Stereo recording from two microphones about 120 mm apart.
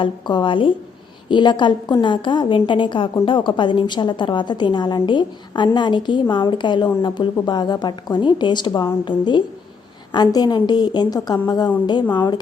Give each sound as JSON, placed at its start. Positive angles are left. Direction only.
{"t": 0.0, "sound": "a woman's voice", "side_deg": 40}